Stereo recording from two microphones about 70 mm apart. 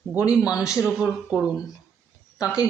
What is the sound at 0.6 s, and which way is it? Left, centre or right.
Speech, left.